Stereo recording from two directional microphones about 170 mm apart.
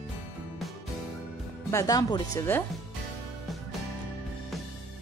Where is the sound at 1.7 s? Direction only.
20° left (ahead or behind).